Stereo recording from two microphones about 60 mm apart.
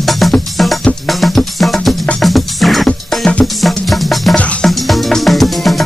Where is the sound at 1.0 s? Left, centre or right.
Centre.